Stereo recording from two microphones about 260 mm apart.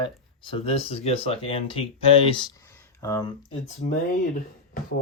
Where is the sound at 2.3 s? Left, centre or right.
Centre.